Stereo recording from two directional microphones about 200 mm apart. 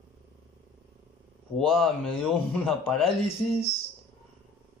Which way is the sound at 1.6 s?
Centre (ahead or behind).